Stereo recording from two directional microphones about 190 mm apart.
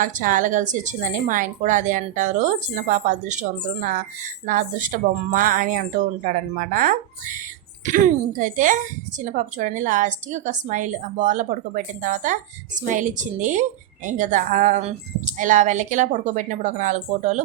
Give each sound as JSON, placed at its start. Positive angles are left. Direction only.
{"t": 0.0, "sound": "a woman's voice", "side_deg": -45}